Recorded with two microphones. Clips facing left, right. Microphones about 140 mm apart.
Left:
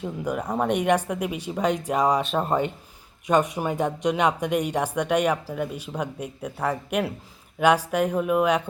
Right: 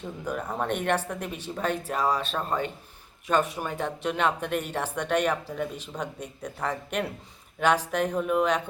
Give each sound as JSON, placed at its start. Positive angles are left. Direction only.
{"t": 0.0, "sound": "speech", "side_deg": 10}